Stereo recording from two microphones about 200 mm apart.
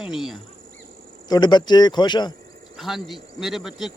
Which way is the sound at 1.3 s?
20° left (ahead or behind).